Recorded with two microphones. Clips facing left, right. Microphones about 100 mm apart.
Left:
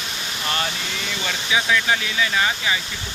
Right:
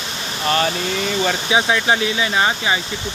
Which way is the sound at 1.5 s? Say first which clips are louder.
Right 1 dB; 30° right (ahead or behind).